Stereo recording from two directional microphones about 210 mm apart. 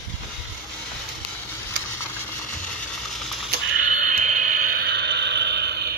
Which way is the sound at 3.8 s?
35° right (ahead or behind).